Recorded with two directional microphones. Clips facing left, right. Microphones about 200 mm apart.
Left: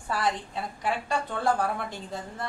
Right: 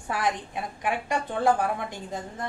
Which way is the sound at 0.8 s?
15° right (ahead or behind).